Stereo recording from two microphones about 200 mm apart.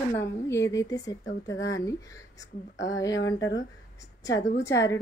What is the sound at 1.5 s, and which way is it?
Speech, 65° left (ahead or behind).